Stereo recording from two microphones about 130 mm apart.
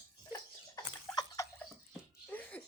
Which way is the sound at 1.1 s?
25° left (ahead or behind).